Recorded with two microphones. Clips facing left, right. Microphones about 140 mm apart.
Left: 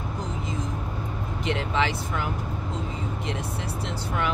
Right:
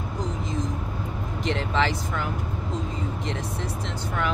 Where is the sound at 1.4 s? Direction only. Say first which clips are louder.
Right 1 dB; 5° left (ahead or behind).